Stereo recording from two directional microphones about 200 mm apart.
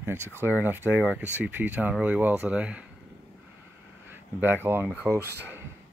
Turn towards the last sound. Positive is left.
turn(degrees=0)  # may be behind; listen again after turning